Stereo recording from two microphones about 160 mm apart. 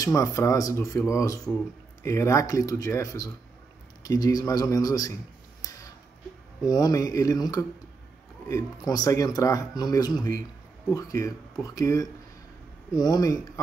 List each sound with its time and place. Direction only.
0.0 s speech: 20° left (ahead or behind)
5.6 s a sound: 20° left (ahead or behind)
6.6 s speech: 25° left (ahead or behind)